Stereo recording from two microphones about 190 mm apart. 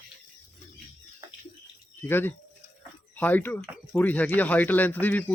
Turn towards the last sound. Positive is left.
turn(degrees=10)  # may be behind; listen again after turning